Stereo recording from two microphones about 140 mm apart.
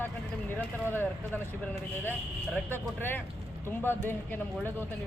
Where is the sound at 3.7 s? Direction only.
15° left (ahead or behind).